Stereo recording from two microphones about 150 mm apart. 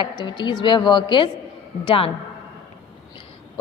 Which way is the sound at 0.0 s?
30° left (ahead or behind).